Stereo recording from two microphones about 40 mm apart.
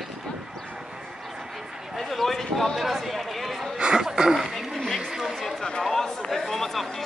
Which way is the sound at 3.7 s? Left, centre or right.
Centre.